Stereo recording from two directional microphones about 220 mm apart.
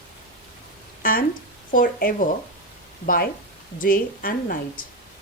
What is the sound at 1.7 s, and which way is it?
Speech, 40° left (ahead or behind).